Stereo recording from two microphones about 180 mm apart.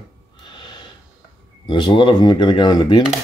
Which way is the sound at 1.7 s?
25° left (ahead or behind).